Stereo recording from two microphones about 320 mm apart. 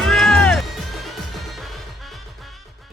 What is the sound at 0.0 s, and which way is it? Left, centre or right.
Music, centre.